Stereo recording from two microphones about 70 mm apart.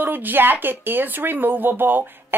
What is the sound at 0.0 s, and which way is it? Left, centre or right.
Speech, right.